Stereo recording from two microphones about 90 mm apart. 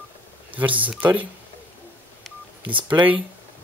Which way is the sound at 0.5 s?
15° right (ahead or behind).